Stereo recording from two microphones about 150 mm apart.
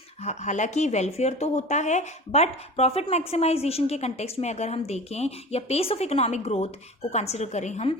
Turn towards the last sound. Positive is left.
turn(degrees=50)  # may be behind; listen again after turning